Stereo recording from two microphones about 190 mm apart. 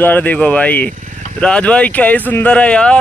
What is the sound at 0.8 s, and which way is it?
Vehicle, 40° right (ahead or behind).